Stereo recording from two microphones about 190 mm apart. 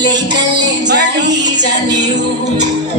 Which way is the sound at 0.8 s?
65° right (ahead or behind).